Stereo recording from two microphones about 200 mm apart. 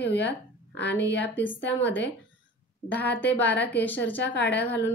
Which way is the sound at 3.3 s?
55° left (ahead or behind).